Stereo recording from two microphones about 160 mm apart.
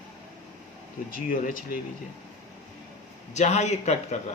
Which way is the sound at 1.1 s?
60° left (ahead or behind).